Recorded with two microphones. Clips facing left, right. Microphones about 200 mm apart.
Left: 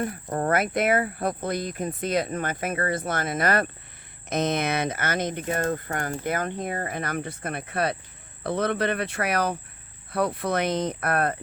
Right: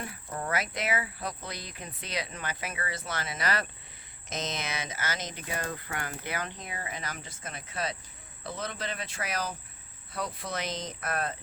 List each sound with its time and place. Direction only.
0.0 s speech: 50° left (ahead or behind)